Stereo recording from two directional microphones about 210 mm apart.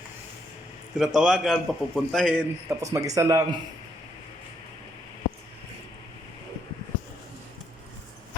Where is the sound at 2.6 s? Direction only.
15° right (ahead or behind).